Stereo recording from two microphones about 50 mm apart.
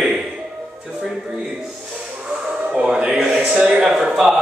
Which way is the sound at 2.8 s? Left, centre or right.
Centre.